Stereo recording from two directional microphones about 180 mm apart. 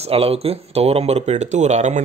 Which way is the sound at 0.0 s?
35° right (ahead or behind).